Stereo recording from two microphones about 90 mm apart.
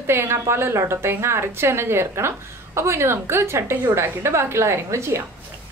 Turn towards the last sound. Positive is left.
turn(degrees=-35)  # may be behind; listen again after turning